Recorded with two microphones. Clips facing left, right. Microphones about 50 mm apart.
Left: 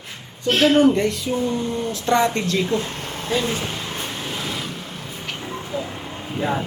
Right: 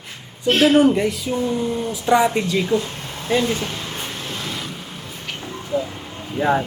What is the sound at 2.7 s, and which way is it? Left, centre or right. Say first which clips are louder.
Vehicle: right 2 dB; left.